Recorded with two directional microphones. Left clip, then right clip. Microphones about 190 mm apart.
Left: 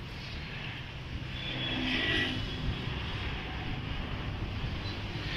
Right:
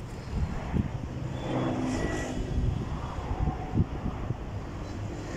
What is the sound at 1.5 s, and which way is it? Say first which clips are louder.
Vehicle: right 2 dB; 35° right (ahead or behind).